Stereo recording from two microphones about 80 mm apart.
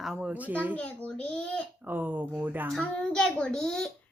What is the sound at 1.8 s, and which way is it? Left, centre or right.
Speech, right.